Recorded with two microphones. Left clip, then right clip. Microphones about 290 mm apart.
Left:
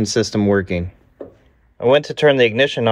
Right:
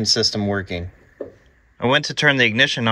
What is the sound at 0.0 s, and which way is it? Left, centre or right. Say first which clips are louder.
Speech: left 1 dB; left.